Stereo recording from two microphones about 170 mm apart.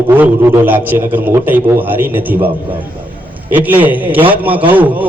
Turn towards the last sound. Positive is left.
turn(degrees=-10)  # may be behind; listen again after turning